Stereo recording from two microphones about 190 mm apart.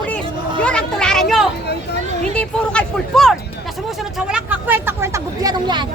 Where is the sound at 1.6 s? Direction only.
60° left (ahead or behind).